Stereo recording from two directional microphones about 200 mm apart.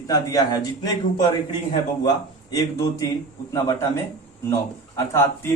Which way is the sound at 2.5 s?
20° left (ahead or behind).